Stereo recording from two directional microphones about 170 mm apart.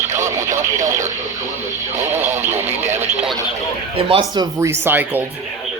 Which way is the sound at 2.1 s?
15° right (ahead or behind).